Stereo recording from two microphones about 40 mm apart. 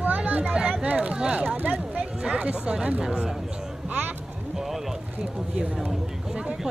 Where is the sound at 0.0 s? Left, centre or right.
Right.